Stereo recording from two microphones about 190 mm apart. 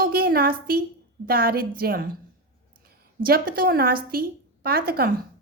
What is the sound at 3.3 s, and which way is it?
A woman's voice, 50° right (ahead or behind).